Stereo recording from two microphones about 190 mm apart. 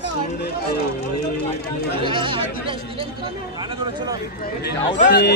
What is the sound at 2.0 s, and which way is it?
Speech, 25° right (ahead or behind).